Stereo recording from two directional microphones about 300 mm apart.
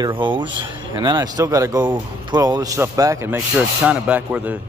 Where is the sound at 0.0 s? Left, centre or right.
Centre.